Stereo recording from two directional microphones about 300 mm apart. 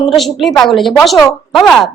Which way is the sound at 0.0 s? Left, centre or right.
Centre.